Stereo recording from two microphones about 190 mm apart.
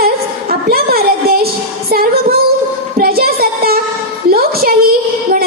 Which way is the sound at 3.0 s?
50° right (ahead or behind).